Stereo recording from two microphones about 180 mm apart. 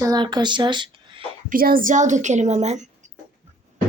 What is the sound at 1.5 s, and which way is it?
A woman's voice, 50° right (ahead or behind).